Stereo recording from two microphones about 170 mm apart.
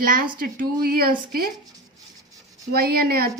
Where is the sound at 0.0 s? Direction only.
55° right (ahead or behind).